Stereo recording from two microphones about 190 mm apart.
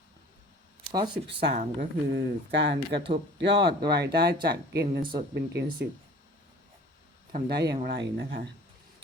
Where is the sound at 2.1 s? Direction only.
65° right (ahead or behind).